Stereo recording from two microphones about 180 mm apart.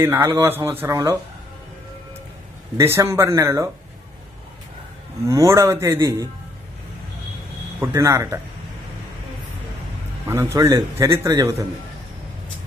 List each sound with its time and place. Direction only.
0.0 s a man's voice: 15° right (ahead or behind)
2.8 s a man's voice: 15° right (ahead or behind)
5.2 s a man's voice: 15° right (ahead or behind)
7.9 s a man's voice: 15° right (ahead or behind)
10.2 s a man's voice: 15° right (ahead or behind)